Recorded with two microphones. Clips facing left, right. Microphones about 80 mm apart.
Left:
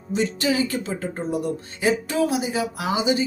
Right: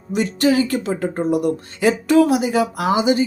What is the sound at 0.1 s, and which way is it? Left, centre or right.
Speech, right.